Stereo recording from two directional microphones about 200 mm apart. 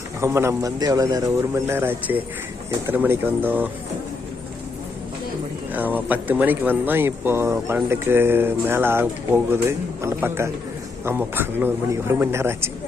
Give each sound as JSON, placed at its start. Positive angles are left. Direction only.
{"t": 0.2, "sound": "speech", "side_deg": -15}
{"t": 5.7, "sound": "speech", "side_deg": -10}